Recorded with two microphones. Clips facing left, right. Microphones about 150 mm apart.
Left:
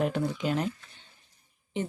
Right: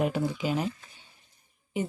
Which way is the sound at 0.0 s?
5° right (ahead or behind).